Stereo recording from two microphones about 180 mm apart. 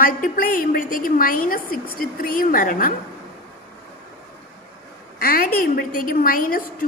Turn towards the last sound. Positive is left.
turn(degrees=50)  # may be behind; listen again after turning